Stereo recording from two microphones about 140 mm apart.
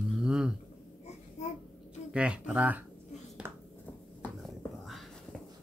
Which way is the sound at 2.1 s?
5° right (ahead or behind).